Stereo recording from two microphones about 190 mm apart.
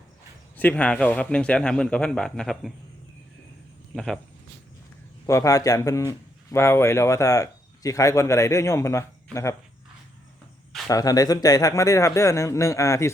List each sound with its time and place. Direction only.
0.5 s a man's voice: 10° left (ahead or behind)
3.9 s a man's voice: 5° left (ahead or behind)
5.2 s a man's voice: 15° left (ahead or behind)
10.8 s a man's voice: 20° left (ahead or behind)